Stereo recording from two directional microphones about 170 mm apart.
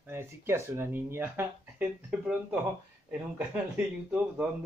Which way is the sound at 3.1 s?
5° right (ahead or behind).